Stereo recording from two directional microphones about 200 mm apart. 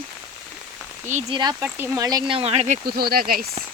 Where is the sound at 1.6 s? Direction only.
10° right (ahead or behind); by 3.4 s 45° right (ahead or behind).